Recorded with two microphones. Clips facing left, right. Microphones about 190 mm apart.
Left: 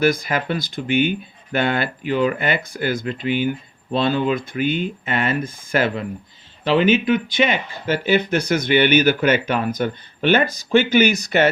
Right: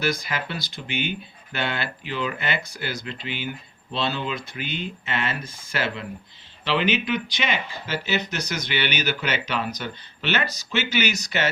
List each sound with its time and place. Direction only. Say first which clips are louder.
0.0 s speech: left 8 dB; 50° left (ahead or behind)